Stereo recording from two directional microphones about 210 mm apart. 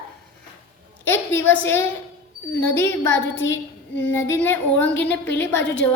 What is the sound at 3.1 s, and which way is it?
Speech, 65° left (ahead or behind).